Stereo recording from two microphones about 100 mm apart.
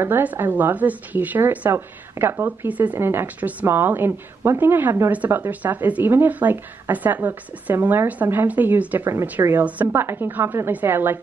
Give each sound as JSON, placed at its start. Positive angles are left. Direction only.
{"t": 0.0, "sound": "a woman's voice", "side_deg": -20}